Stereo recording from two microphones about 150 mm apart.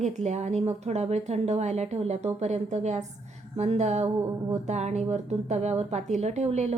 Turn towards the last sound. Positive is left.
turn(degrees=-50)  # may be behind; listen again after turning